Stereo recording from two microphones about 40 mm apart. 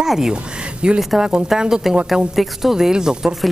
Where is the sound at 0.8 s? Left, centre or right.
Right.